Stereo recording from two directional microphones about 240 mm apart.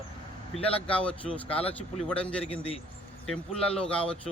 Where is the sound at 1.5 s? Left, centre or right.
Left.